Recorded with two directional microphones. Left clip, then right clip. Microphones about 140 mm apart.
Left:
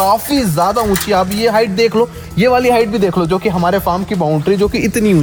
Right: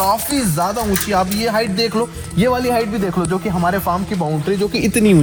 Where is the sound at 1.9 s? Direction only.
60° left (ahead or behind); by 3.9 s 75° left (ahead or behind).